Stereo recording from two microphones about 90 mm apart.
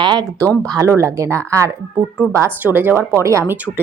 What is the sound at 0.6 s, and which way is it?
Speech, 40° right (ahead or behind).